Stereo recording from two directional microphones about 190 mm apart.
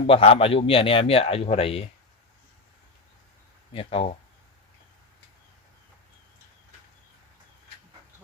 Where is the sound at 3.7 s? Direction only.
30° left (ahead or behind).